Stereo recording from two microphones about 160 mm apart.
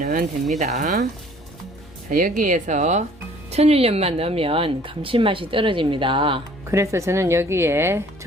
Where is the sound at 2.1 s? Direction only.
60° right (ahead or behind); by 6.4 s 30° right (ahead or behind).